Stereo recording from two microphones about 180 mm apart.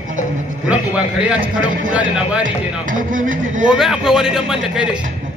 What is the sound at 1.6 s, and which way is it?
Speech, 45° right (ahead or behind).